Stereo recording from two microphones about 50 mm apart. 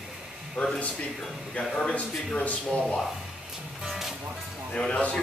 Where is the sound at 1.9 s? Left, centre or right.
Left.